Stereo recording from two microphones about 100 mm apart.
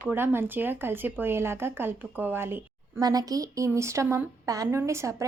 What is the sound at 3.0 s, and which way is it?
A woman's voice, 40° right (ahead or behind).